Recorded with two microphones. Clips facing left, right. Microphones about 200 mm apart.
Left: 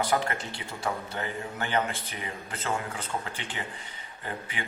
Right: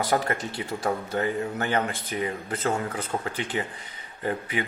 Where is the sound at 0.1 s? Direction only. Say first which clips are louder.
Right 3 dB; 40° right (ahead or behind).